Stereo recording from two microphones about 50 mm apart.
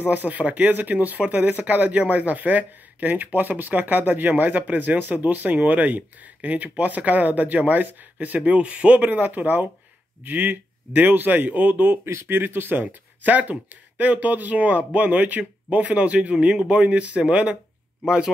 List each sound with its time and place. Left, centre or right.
0.0 s speech: right
12.8 s speech: right; by 18.3 s centre